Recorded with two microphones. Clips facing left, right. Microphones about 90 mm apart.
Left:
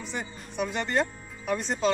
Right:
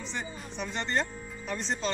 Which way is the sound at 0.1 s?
5° left (ahead or behind).